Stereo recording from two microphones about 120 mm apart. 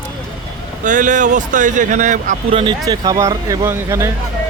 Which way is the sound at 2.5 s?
50° right (ahead or behind).